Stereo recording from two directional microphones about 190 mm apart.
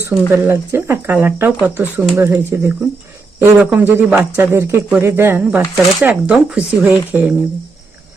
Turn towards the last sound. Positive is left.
turn(degrees=-10)  # may be behind; listen again after turning